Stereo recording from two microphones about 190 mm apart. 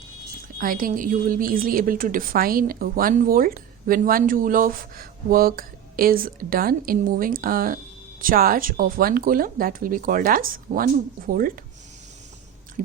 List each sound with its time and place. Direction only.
0.6 s a woman's voice: 45° right (ahead or behind)